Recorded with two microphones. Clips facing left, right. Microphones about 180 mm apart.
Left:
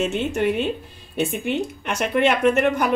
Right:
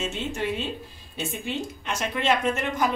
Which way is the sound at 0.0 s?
65° left (ahead or behind).